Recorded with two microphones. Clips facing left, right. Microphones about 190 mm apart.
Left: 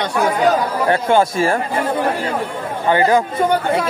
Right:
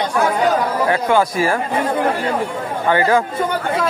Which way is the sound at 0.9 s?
25° left (ahead or behind).